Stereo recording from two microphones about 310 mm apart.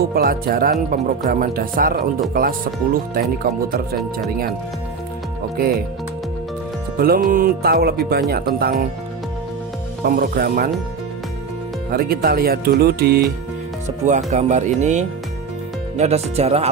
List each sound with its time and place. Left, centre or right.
0.1 s speech: right
6.9 s music: right
8.3 s speech: right
10.0 s speech: right
11.9 s speech: right